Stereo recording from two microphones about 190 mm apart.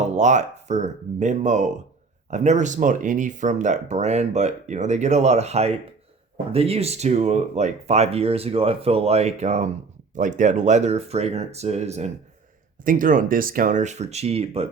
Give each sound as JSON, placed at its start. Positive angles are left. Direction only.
{"t": 0.0, "sound": "speech", "side_deg": -35}
{"t": 12.8, "sound": "speech", "side_deg": -45}